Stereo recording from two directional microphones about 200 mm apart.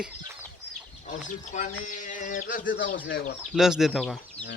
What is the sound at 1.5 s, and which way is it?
Speech, 40° left (ahead or behind).